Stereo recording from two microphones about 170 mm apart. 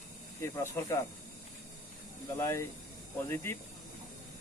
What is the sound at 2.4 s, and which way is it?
Speech, 15° left (ahead or behind).